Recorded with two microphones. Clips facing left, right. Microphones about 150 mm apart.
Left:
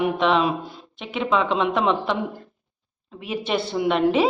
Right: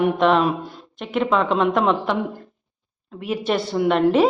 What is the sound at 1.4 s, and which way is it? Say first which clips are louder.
Speech: right 3 dB; 45° right (ahead or behind).